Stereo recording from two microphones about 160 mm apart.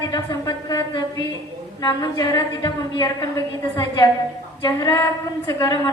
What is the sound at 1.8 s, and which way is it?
A woman's voice, 25° left (ahead or behind).